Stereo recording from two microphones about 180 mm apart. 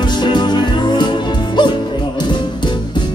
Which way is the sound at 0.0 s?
25° left (ahead or behind).